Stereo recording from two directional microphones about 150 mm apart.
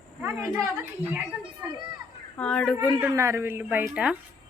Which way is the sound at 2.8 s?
20° right (ahead or behind).